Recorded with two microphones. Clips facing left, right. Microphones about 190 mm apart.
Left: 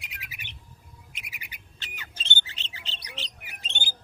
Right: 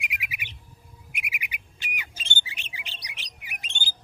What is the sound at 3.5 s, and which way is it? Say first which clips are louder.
Squawk: even; 15° right (ahead or behind).